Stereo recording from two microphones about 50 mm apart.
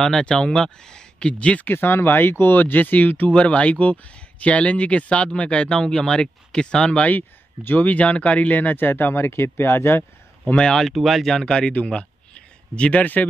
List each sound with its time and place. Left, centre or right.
0.0 s speech: centre
1.7 s speech: left; by 7.1 s centre
7.1 s speech: left
9.1 s speech: left
10.4 s speech: centre
11.3 s speech: centre
13.0 s speech: left